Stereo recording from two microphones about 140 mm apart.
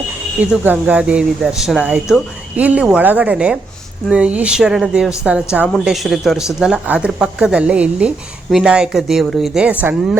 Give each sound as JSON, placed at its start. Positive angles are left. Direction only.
{"t": 0.3, "sound": "speech", "side_deg": -10}